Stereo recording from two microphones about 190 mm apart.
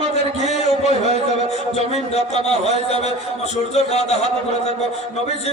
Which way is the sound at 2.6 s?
35° left (ahead or behind).